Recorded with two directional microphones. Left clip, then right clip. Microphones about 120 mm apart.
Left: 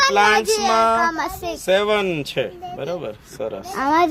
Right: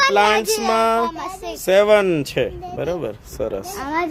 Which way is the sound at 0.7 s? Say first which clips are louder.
Even; 60° right (ahead or behind).